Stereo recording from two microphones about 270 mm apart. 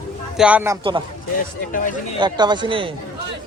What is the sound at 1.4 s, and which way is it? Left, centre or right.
Speech, left.